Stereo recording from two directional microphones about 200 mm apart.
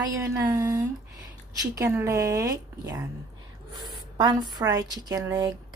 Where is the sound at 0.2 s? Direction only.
15° right (ahead or behind).